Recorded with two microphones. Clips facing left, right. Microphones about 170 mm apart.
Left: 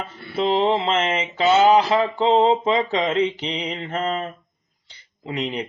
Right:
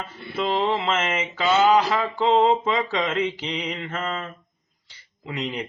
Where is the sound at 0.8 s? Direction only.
30° left (ahead or behind).